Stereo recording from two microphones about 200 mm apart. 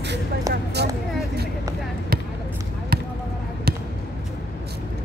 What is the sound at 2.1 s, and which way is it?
Basketball bounce, 50° right (ahead or behind).